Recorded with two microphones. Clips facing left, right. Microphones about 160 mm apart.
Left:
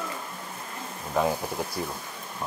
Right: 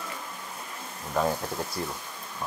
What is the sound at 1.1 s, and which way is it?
Speech, 10° left (ahead or behind).